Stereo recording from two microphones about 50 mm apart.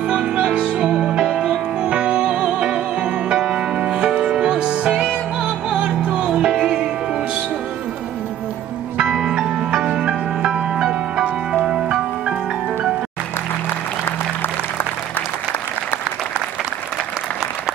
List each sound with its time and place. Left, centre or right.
0.1 s music: right
9.0 s music: centre